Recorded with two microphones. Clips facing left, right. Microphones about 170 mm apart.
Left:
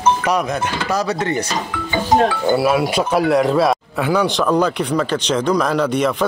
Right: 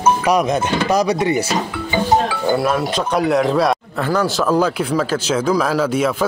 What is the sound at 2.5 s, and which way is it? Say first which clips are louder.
Speech: even; 5° left (ahead or behind).